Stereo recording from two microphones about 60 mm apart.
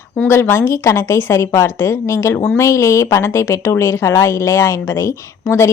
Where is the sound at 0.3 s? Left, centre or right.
Left.